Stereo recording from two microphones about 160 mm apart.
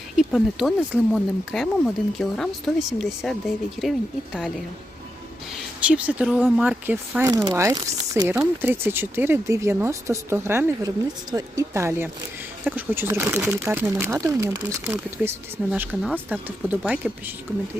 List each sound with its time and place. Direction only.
0.2 s speech: centre (ahead or behind)
5.8 s speech: 10° right (ahead or behind); by 8.3 s 25° right (ahead or behind)
8.3 s speech: 15° right (ahead or behind)